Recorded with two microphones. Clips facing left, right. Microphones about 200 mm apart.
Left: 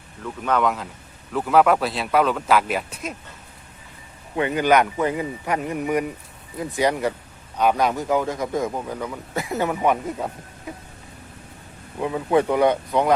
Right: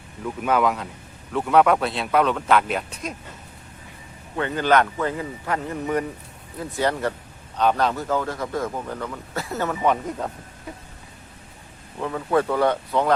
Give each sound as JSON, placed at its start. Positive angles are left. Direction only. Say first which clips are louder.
{"t": 0.2, "sound": "speech", "louder": "right 1 dB", "side_deg": -10}
{"t": 4.4, "sound": "speech", "louder": "left 2 dB", "side_deg": 15}
{"t": 11.9, "sound": "speech", "louder": "left 2 dB", "side_deg": 15}